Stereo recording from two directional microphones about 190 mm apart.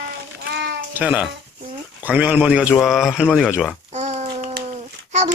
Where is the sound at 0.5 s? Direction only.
65° right (ahead or behind).